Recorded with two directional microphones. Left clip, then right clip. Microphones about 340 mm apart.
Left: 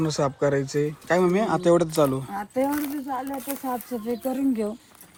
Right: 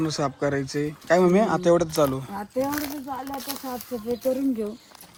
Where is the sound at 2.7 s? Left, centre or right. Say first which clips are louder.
Left 2 dB; right.